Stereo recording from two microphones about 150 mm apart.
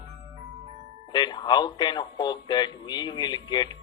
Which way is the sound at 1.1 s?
30° left (ahead or behind).